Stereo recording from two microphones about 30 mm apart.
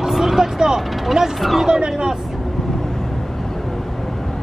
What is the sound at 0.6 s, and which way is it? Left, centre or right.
Vehicle, right.